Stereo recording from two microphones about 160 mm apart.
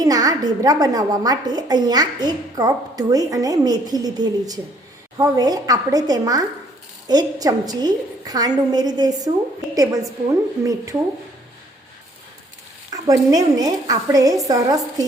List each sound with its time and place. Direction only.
0.0 s a woman's voice: 25° right (ahead or behind)
12.9 s a woman's voice: 20° right (ahead or behind)